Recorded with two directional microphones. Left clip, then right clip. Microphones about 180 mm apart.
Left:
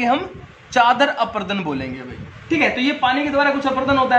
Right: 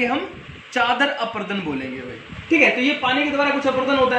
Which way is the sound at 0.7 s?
45° left (ahead or behind).